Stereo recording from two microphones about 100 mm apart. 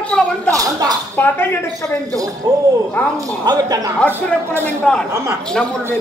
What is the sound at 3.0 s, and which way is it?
Speech, 15° left (ahead or behind).